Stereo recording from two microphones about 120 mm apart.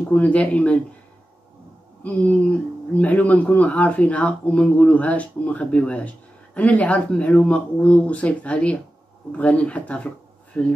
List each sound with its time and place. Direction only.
0.1 s speech: 10° left (ahead or behind)
2.0 s speech: 15° left (ahead or behind)